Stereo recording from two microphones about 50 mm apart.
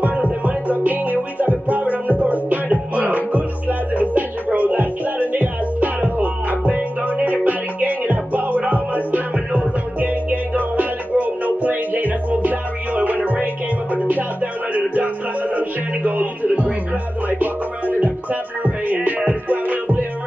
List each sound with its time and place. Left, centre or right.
0.5 s music: right
18.0 s music: right